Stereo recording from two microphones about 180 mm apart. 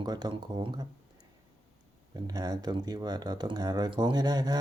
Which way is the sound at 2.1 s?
20° right (ahead or behind).